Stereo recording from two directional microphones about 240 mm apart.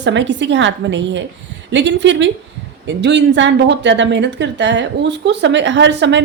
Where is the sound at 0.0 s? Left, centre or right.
Right.